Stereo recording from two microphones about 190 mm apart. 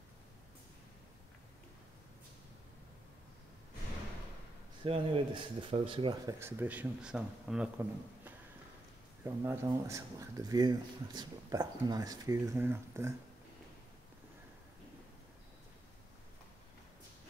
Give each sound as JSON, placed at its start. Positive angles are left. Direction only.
{"t": 4.8, "sound": "speech", "side_deg": -30}
{"t": 6.4, "sound": "speech", "side_deg": -10}
{"t": 9.2, "sound": "speech", "side_deg": -15}